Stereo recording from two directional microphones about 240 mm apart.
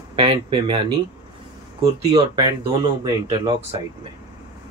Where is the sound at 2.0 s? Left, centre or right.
Right.